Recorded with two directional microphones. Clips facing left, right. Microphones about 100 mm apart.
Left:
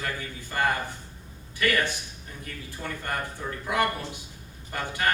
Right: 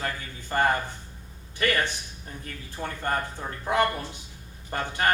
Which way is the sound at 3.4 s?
30° right (ahead or behind).